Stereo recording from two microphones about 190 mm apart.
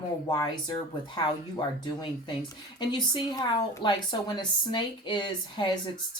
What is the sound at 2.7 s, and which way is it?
Speech, 25° left (ahead or behind).